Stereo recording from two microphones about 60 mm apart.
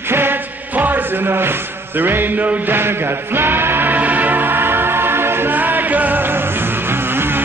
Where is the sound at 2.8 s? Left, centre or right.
Right.